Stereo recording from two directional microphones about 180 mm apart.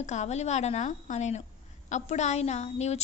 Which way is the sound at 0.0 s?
40° left (ahead or behind).